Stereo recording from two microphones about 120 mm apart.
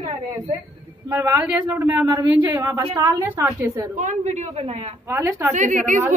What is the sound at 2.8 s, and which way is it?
Speech, 40° right (ahead or behind).